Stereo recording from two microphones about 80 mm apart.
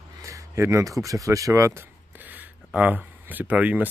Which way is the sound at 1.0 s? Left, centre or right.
Right.